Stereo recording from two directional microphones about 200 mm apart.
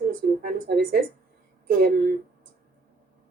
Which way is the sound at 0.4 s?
45° right (ahead or behind).